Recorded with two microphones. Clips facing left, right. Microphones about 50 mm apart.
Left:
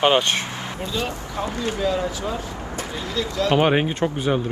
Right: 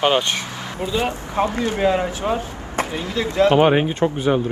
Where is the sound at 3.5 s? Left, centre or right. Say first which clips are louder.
Right 3 dB; centre.